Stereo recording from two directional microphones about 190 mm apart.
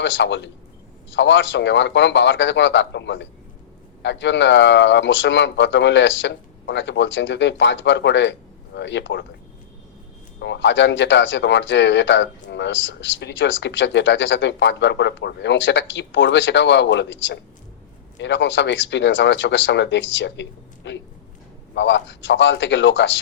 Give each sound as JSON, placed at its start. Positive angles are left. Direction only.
{"t": 0.0, "sound": "speech", "side_deg": 70}
{"t": 10.4, "sound": "speech", "side_deg": 70}